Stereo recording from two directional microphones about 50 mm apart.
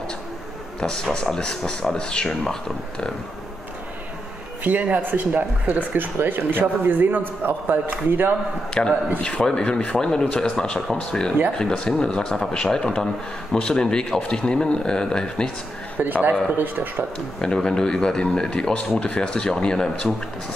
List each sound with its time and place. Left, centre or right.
0.7 s speech: centre
4.9 s speech: right
8.8 s speech: centre
16.0 s speech: right
17.4 s speech: centre